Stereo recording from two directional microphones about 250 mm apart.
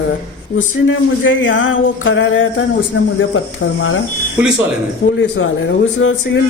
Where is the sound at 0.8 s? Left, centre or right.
Left.